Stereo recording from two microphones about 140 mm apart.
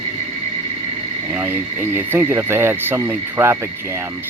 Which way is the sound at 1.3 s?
15° right (ahead or behind).